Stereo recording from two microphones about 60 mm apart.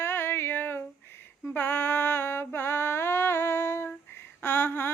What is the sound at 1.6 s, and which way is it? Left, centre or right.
Music, left.